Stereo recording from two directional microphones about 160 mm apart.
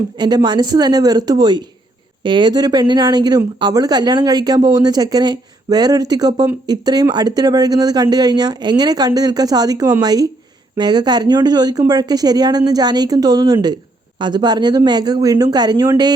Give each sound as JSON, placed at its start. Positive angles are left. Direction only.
{"t": 0.2, "sound": "speech", "side_deg": -25}